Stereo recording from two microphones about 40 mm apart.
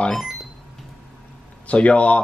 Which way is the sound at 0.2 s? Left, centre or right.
Centre.